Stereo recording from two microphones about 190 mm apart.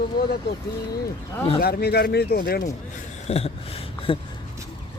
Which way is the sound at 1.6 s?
55° left (ahead or behind).